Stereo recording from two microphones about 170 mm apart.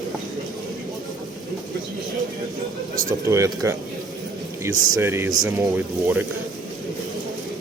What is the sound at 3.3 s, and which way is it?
Speech, 20° right (ahead or behind).